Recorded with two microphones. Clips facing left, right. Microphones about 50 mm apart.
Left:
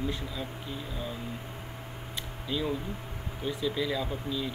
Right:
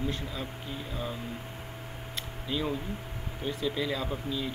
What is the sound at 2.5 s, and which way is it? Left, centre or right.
Speech, centre.